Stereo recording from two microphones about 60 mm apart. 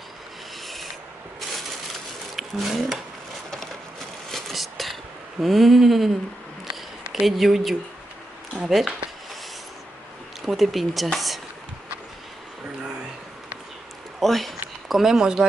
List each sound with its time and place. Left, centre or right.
2.3 s speech: centre
4.3 s vehicle: centre
5.4 s speech: centre
6.7 s a sound: centre
7.2 s speech: centre
10.4 s speech: centre
14.2 s speech: centre